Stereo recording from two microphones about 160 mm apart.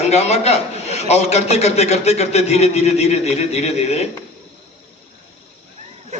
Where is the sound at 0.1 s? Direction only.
40° left (ahead or behind).